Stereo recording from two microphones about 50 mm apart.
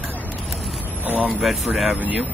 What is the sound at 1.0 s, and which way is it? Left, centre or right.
Speech, right.